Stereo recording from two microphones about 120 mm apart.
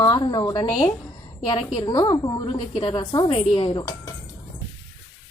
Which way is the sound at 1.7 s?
35° left (ahead or behind).